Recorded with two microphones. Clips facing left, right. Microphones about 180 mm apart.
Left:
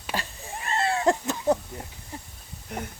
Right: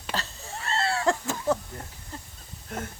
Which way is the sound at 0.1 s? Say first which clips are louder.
Left 1 dB; 15° left (ahead or behind).